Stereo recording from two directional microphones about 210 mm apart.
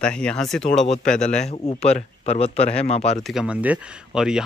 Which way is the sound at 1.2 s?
35° left (ahead or behind).